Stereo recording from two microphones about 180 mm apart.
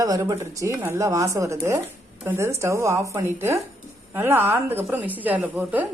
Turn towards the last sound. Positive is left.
turn(degrees=-10)  # may be behind; listen again after turning